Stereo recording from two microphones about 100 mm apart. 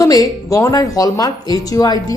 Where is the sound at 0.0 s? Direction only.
35° left (ahead or behind).